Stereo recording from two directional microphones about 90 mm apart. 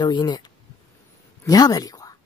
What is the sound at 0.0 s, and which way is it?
Speech, 55° left (ahead or behind).